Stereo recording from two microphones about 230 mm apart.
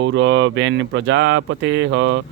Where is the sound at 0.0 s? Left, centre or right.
Right.